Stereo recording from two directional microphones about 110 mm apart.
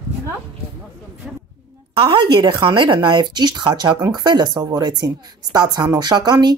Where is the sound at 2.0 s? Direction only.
50° right (ahead or behind).